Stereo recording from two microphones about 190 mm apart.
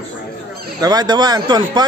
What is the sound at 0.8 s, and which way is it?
A man's voice, 20° right (ahead or behind).